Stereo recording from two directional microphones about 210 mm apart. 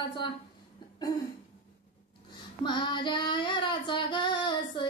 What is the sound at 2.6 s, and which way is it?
Female singing, 20° left (ahead or behind).